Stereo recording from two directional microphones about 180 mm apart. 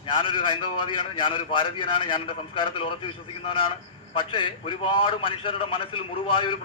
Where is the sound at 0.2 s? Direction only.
30° left (ahead or behind).